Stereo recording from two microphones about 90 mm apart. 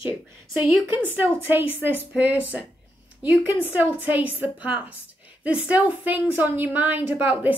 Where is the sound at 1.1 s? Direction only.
25° right (ahead or behind).